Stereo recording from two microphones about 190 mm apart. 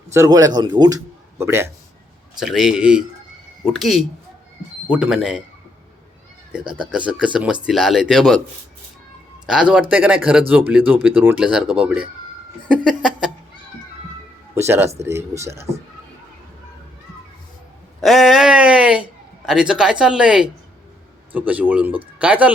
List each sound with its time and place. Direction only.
0.1 s speech: 15° right (ahead or behind)
2.4 s speech: 5° right (ahead or behind)
6.9 s speech: 5° right (ahead or behind)
9.5 s speech: 5° right (ahead or behind)
14.5 s speech: 15° right (ahead or behind)
18.0 s speech: centre (ahead or behind)